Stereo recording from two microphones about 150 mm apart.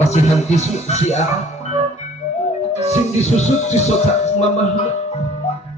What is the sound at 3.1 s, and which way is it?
Speech, 50° left (ahead or behind).